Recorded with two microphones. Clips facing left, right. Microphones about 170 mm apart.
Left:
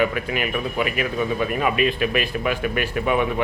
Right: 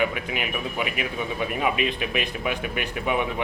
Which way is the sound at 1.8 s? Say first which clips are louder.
Left 5 dB; 20° right (ahead or behind).